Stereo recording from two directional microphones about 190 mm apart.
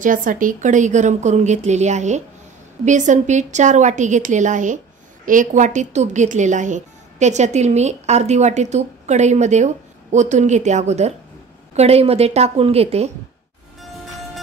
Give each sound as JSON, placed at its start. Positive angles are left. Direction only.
{"t": 0.0, "sound": "a woman's voice", "side_deg": -45}